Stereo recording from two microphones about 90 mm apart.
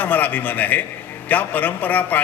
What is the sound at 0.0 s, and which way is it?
A man's voice, 20° left (ahead or behind).